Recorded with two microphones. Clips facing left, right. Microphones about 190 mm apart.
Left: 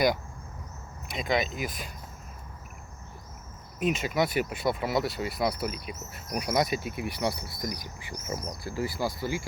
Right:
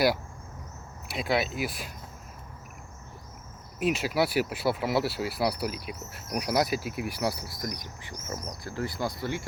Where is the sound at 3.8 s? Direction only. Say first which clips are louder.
Right 1 dB; 5° right (ahead or behind).